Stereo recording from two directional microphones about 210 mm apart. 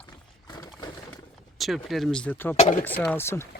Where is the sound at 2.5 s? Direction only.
35° left (ahead or behind).